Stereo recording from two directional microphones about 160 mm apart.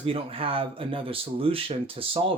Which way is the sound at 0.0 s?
35° right (ahead or behind).